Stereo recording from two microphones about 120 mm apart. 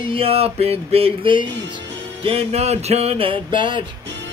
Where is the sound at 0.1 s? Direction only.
55° right (ahead or behind).